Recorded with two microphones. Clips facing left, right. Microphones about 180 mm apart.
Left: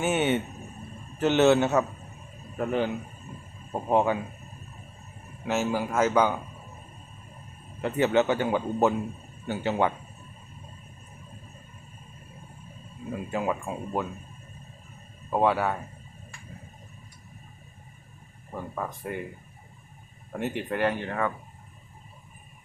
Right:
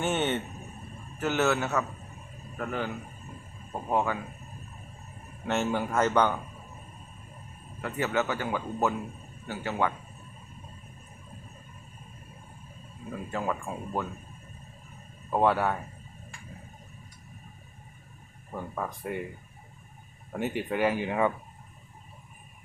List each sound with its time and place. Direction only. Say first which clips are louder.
0.0 s speech: left 3 dB; 10° left (ahead or behind)
1.2 s a man's voice: left 7 dB; 25° left (ahead or behind)
5.5 s speech: left 1 dB; 5° left (ahead or behind)
7.8 s a man's voice: left 6 dB; 25° left (ahead or behind)
13.3 s speech: left 3 dB; 15° left (ahead or behind)
15.3 s speech: left 1 dB; centre (ahead or behind)
18.5 s speech: left 1 dB; centre (ahead or behind)
20.3 s speech: even; centre (ahead or behind)